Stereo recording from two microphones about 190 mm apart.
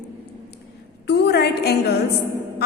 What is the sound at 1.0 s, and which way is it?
Speech, 60° left (ahead or behind).